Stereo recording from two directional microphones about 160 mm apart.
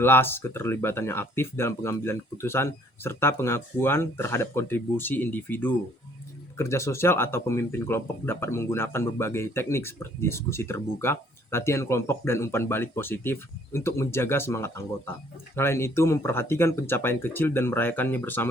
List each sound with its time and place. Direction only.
0.0 s speech: 15° left (ahead or behind)